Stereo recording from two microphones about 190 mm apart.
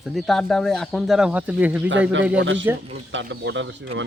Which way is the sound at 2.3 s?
75° right (ahead or behind).